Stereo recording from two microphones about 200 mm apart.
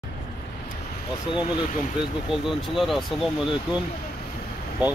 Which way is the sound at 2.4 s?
Centre (ahead or behind).